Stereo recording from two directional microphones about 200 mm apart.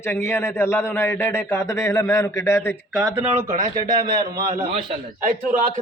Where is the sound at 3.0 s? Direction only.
Centre (ahead or behind).